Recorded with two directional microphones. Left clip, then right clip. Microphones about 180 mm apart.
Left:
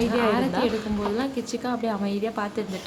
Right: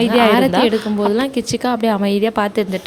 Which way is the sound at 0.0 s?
50° right (ahead or behind).